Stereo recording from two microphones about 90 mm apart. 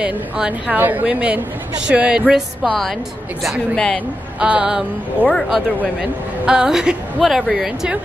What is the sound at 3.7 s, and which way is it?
Speech, 10° left (ahead or behind).